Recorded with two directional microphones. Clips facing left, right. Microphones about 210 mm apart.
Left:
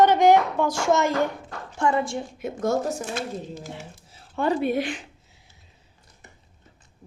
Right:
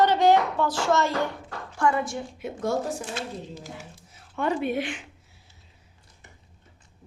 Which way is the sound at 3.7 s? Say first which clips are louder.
Left 3 dB; 30° left (ahead or behind).